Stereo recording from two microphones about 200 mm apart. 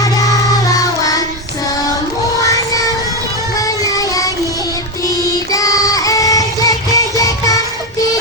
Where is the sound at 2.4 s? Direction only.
15° left (ahead or behind).